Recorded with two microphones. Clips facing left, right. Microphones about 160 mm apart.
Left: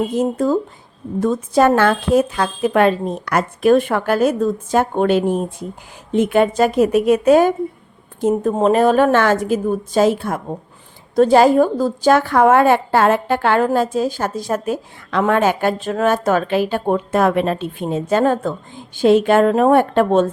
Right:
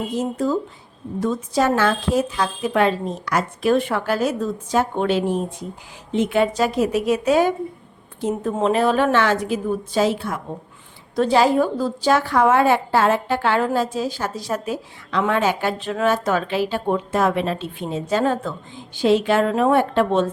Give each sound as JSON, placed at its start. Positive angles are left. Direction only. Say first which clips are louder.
{"t": 0.2, "sound": "a woman's voice", "louder": "left 3 dB", "side_deg": 50}